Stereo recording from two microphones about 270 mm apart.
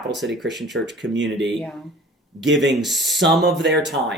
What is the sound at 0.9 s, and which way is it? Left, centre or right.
Speech, right.